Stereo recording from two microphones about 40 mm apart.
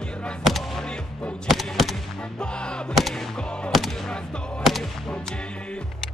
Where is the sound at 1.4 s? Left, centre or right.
Centre.